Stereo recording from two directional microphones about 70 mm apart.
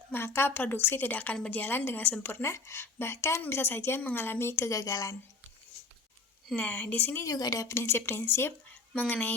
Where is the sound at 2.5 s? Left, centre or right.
Left.